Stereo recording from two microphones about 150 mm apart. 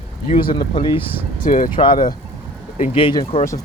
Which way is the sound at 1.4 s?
65° left (ahead or behind).